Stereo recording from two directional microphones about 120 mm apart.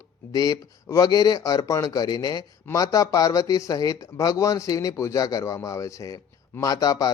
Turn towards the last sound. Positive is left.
turn(degrees=30)  # may be behind; listen again after turning